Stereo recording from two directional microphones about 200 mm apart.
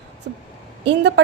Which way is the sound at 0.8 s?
60° right (ahead or behind).